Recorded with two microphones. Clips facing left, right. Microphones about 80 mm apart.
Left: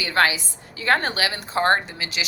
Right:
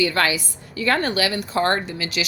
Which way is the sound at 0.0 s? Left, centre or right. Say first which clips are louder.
Even; left.